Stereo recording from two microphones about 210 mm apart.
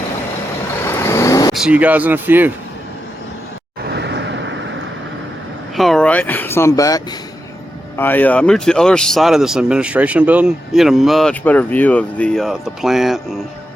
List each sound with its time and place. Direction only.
0.9 s vehicle: 15° left (ahead or behind)
1.5 s speech: 5° right (ahead or behind)
3.8 s vehicle: 55° right (ahead or behind)
5.7 s speech: centre (ahead or behind)